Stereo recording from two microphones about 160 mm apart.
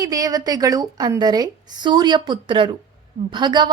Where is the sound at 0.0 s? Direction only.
20° right (ahead or behind).